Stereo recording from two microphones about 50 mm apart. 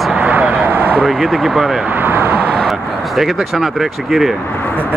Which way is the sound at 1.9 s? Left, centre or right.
Right.